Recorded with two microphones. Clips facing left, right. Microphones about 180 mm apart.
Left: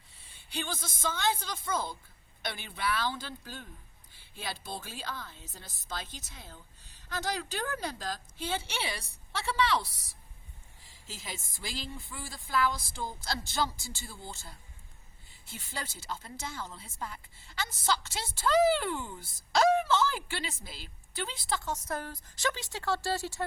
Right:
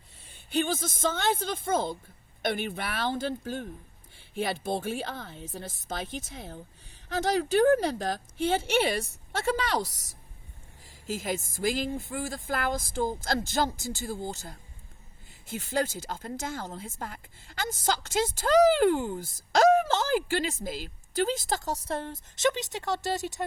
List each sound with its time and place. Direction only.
0.5 s speech: 50° right (ahead or behind); by 23.5 s 20° right (ahead or behind)